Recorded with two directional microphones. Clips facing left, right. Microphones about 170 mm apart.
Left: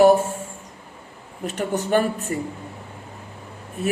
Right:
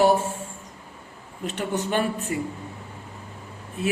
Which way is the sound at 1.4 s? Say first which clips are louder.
Left 2 dB; 45° left (ahead or behind).